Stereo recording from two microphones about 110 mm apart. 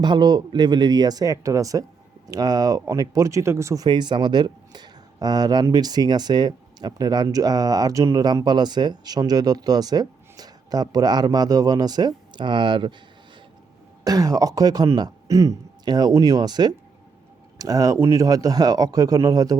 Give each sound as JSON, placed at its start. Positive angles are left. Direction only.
{"t": 0.0, "sound": "speech", "side_deg": -40}
{"t": 3.8, "sound": "speech", "side_deg": -40}
{"t": 14.0, "sound": "speech", "side_deg": -35}